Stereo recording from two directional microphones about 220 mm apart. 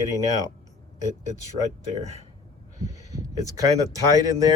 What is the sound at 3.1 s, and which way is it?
Speech, 15° right (ahead or behind).